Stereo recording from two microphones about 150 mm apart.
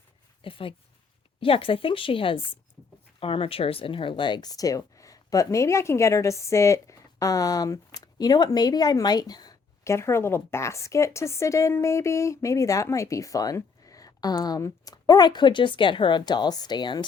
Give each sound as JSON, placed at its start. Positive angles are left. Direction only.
{"t": 0.4, "sound": "speech", "side_deg": 35}